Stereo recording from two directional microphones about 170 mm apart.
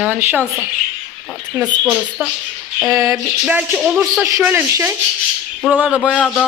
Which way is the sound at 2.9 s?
20° right (ahead or behind).